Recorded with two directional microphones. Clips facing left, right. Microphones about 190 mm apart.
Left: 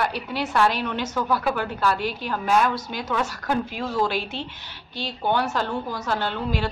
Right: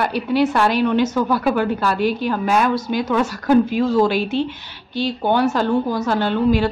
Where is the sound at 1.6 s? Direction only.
10° right (ahead or behind).